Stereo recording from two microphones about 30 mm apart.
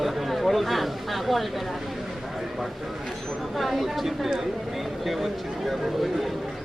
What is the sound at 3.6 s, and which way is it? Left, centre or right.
Speech, centre.